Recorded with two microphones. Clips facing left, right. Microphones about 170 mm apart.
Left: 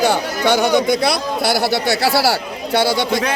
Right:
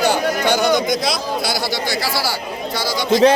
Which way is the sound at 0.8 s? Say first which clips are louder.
Left 3 dB; 65° left (ahead or behind).